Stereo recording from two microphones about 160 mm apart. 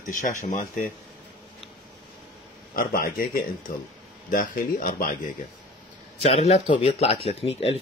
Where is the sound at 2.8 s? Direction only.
65° left (ahead or behind).